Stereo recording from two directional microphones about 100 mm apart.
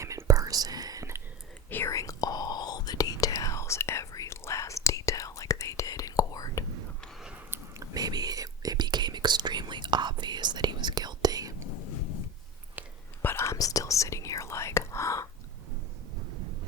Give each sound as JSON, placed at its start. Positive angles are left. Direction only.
{"t": 0.0, "sound": "whispering", "side_deg": -30}
{"t": 1.7, "sound": "whispering", "side_deg": 30}
{"t": 7.5, "sound": "whispering", "side_deg": -25}
{"t": 7.9, "sound": "whispering", "side_deg": -40}
{"t": 13.2, "sound": "whispering", "side_deg": 25}